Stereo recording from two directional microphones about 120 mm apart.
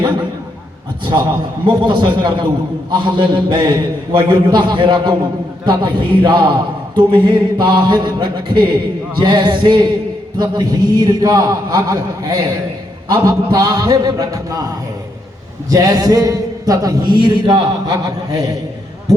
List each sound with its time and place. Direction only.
1.0 s a man's voice: 40° right (ahead or behind)
15.7 s a man's voice: 30° right (ahead or behind)
17.2 s a man's voice: 40° right (ahead or behind)